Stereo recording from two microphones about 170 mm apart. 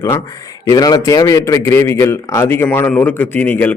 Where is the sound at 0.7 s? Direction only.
20° left (ahead or behind).